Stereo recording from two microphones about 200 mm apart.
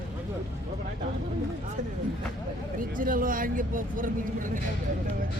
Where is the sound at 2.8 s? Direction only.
45° right (ahead or behind).